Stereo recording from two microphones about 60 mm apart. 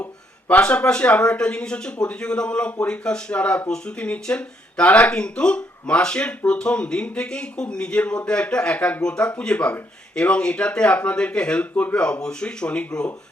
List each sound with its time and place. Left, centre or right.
0.6 s speech: centre